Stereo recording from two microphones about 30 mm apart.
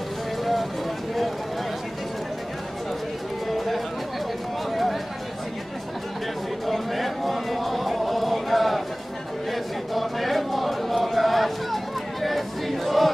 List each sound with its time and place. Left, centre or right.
0.4 s vehicle: centre
3.4 s music: centre
4.6 s chatter: centre
6.6 s a sound: centre